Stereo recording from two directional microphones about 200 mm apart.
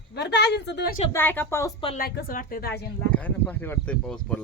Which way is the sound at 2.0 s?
50° left (ahead or behind).